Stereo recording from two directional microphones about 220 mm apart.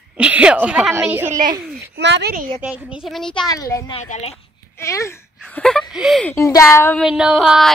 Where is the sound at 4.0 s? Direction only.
30° left (ahead or behind).